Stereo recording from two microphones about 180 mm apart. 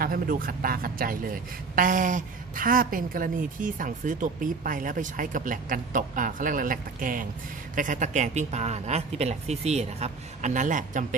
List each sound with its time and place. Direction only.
0.0 s a man's voice: 55° right (ahead or behind)